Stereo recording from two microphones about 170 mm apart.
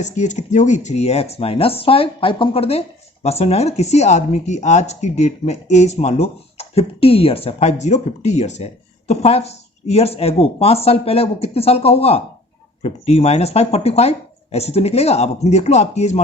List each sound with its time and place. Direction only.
0.0 s speech: 45° left (ahead or behind)